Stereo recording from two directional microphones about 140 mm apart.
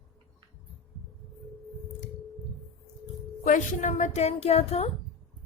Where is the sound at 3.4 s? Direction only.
65° left (ahead or behind); by 4.9 s 45° left (ahead or behind).